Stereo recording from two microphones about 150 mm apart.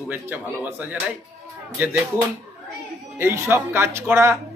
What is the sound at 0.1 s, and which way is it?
Speech, 15° right (ahead or behind).